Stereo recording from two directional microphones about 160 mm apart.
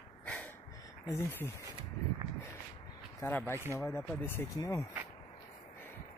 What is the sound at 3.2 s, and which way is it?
Speech, 15° left (ahead or behind).